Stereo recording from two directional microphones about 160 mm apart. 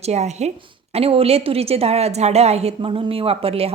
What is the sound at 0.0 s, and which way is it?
A woman's voice, 45° right (ahead or behind).